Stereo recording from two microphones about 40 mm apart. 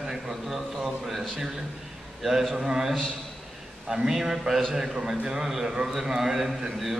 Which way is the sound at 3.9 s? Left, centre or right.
Centre.